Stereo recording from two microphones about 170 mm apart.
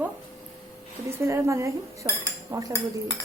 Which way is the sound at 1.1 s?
15° right (ahead or behind).